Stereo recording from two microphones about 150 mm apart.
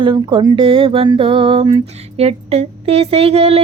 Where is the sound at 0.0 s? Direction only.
35° right (ahead or behind).